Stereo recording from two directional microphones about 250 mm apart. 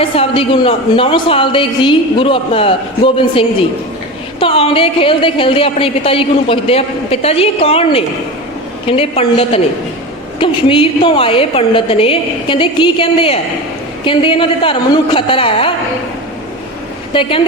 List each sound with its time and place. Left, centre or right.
0.0 s a woman's voice: left
17.2 s a woman's voice: left